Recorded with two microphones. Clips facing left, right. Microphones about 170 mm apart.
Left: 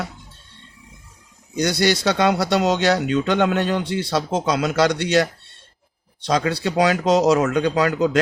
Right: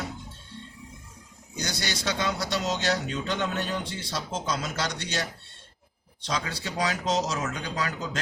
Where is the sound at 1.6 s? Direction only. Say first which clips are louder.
Left 14 dB; 65° left (ahead or behind).